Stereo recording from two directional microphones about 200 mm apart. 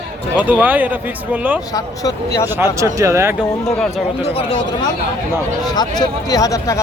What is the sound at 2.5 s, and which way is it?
Speech, 15° right (ahead or behind).